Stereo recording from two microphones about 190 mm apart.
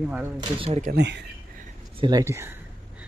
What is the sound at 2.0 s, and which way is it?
Speech, 20° right (ahead or behind).